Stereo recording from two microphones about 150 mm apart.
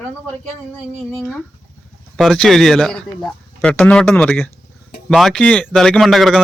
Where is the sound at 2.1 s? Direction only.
Centre (ahead or behind).